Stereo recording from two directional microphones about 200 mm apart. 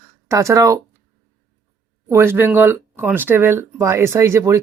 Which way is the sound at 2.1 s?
10° right (ahead or behind).